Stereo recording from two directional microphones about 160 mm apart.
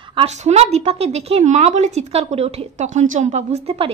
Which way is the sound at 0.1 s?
40° right (ahead or behind).